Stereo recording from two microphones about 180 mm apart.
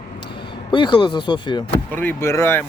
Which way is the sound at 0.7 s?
25° left (ahead or behind).